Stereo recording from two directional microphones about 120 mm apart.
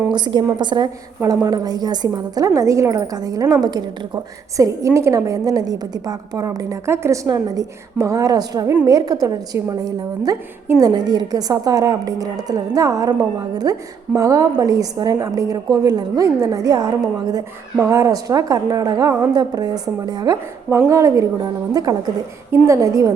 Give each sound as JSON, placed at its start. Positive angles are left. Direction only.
{"t": 0.6, "sound": "a woman's voice", "side_deg": -40}
{"t": 1.2, "sound": "a woman's voice", "side_deg": -30}